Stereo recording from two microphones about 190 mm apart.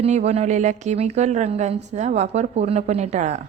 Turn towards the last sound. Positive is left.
turn(degrees=-35)  # may be behind; listen again after turning